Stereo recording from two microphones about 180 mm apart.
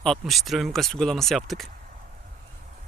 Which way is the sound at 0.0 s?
Centre (ahead or behind).